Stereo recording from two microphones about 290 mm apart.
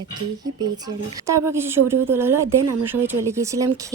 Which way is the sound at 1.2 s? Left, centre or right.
Centre.